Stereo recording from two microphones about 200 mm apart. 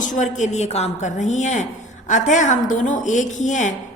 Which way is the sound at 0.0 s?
40° left (ahead or behind).